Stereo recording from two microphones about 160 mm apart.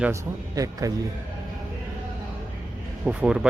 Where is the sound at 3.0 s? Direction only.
10° right (ahead or behind).